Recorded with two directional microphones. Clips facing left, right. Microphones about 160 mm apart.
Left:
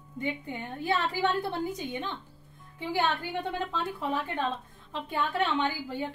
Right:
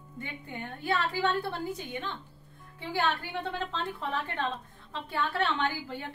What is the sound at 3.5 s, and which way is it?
A woman's voice, 15° left (ahead or behind).